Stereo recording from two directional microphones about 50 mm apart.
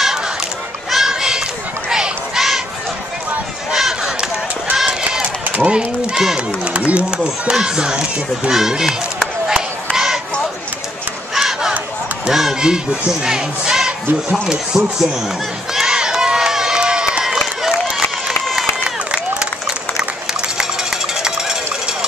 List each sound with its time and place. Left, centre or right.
0.8 s a sound: centre
1.9 s run: centre
3.7 s chop: centre
4.7 s run: centre
5.6 s speech: right
9.9 s a sound: centre
11.3 s battle cry: centre
12.3 s speech: centre
15.7 s run: centre
21.1 s music: centre